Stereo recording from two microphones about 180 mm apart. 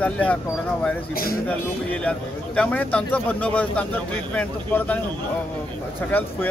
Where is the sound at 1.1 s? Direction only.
55° left (ahead or behind).